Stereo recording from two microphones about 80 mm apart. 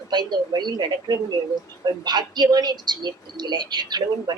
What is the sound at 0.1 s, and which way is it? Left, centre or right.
A woman's voice, right.